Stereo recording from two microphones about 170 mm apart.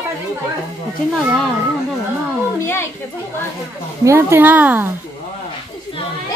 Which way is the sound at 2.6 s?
15° left (ahead or behind).